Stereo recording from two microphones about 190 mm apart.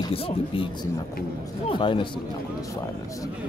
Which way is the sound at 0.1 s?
30° left (ahead or behind).